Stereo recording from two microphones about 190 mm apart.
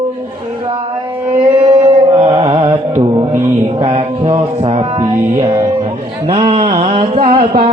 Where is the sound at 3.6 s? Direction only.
30° right (ahead or behind).